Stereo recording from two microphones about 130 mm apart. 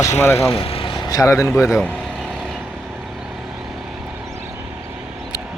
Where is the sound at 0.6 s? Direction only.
45° left (ahead or behind).